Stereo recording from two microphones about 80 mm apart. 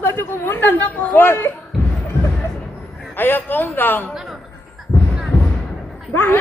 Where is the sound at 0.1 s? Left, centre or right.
Left.